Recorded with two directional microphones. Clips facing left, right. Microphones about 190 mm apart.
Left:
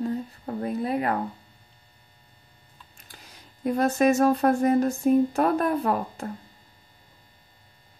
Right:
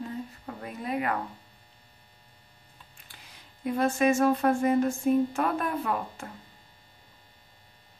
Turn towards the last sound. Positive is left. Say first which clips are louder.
# left 5 dB
turn(degrees=40)  # may be behind; listen again after turning